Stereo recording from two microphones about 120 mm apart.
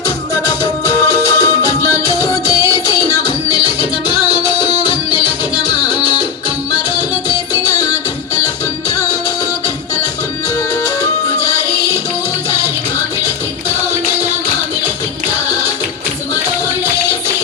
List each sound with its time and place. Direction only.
0.0 s music: 30° left (ahead or behind)
9.0 s music: 25° right (ahead or behind)